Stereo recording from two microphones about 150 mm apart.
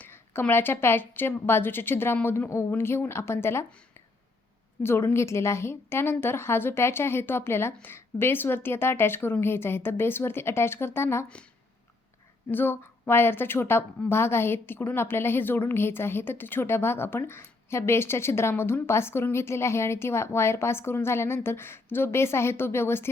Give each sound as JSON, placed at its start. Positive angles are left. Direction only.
{"t": 0.0, "sound": "a woman's voice", "side_deg": 15}
{"t": 4.8, "sound": "a woman's voice", "side_deg": 15}
{"t": 12.5, "sound": "a woman's voice", "side_deg": 15}